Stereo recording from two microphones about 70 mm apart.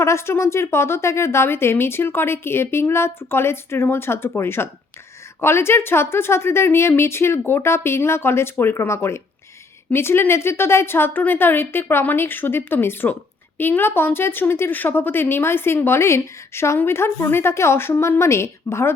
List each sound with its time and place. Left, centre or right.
0.0 s speech: left